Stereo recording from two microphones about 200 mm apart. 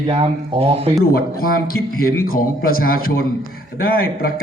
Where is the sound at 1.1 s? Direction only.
45° left (ahead or behind).